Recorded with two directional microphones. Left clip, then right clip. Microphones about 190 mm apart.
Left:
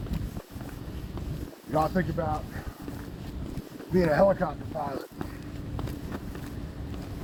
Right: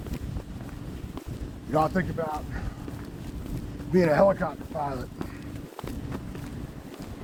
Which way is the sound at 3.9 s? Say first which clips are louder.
Right 2 dB; 10° right (ahead or behind).